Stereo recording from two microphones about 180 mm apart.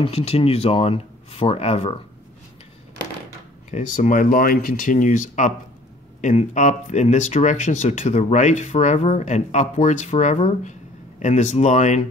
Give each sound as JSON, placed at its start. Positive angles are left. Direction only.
{"t": 0.0, "sound": "speech", "side_deg": 35}
{"t": 3.7, "sound": "speech", "side_deg": 40}